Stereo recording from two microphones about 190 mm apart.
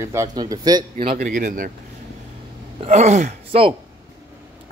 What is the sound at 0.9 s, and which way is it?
Speech, 45° right (ahead or behind).